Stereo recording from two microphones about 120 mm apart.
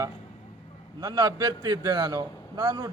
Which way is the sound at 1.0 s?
30° right (ahead or behind).